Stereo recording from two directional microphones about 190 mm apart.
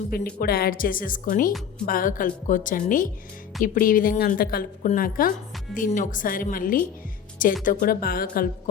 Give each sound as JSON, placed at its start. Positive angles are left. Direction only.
{"t": 0.1, "sound": "a woman's voice", "side_deg": 50}